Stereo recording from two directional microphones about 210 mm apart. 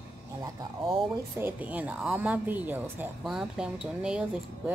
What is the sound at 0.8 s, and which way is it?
A woman's voice, 5° right (ahead or behind).